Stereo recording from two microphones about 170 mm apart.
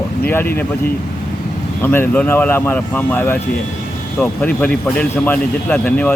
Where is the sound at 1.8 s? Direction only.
10° left (ahead or behind).